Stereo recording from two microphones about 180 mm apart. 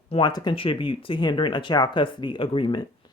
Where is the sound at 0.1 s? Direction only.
25° left (ahead or behind).